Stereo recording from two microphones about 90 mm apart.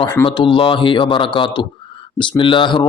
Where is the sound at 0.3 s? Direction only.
60° left (ahead or behind).